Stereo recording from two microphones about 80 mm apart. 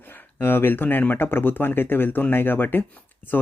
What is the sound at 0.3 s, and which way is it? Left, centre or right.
Speech, left.